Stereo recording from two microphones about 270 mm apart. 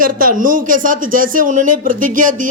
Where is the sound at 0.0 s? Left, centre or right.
Right.